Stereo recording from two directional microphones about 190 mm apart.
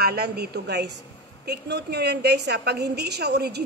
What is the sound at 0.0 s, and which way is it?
A woman's voice, 55° right (ahead or behind).